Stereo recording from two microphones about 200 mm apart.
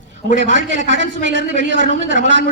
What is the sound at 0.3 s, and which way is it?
Speech, 65° right (ahead or behind).